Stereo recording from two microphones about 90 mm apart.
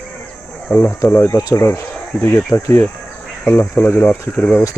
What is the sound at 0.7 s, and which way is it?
Speech, 20° left (ahead or behind).